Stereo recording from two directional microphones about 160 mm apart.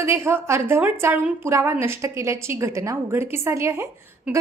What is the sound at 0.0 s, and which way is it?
A woman's voice, 15° right (ahead or behind).